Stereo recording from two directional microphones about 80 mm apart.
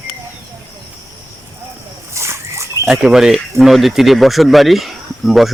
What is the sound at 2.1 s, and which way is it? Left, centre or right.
Dog, right.